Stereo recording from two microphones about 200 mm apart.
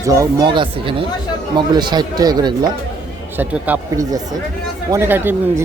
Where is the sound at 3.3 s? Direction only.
10° right (ahead or behind).